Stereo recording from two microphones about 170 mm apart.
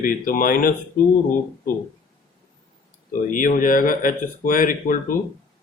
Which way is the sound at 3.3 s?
55° left (ahead or behind).